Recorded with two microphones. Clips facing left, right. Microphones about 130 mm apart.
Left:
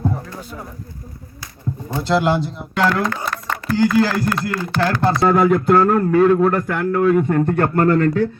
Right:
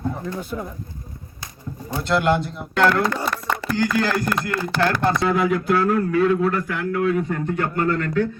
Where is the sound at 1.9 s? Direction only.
30° left (ahead or behind).